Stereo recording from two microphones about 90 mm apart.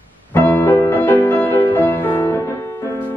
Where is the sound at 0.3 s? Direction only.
20° left (ahead or behind).